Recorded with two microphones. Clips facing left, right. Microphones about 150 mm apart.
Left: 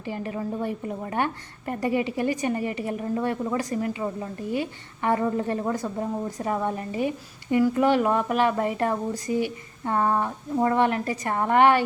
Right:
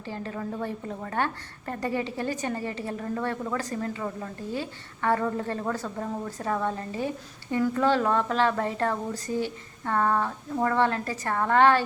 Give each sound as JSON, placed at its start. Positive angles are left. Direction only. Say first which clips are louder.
{"t": 0.1, "sound": "a woman's voice", "louder": "left 4 dB", "side_deg": 15}